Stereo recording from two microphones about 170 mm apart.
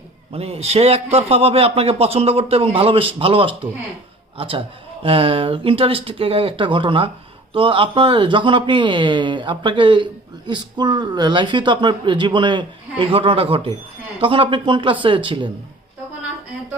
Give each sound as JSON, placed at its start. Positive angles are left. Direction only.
{"t": 0.3, "sound": "a man's voice", "side_deg": -35}